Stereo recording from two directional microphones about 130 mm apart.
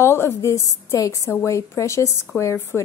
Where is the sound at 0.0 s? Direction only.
20° left (ahead or behind).